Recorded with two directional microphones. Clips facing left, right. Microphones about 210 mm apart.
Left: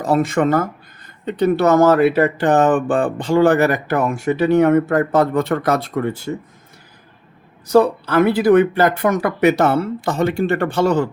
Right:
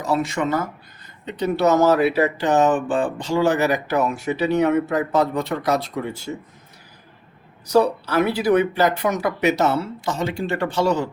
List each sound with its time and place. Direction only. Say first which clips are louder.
0.0 s speech: left 6 dB; 50° left (ahead or behind)
7.7 s speech: left 4 dB; 50° left (ahead or behind)